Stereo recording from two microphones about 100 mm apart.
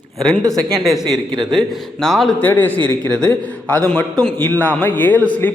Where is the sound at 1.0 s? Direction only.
45° right (ahead or behind).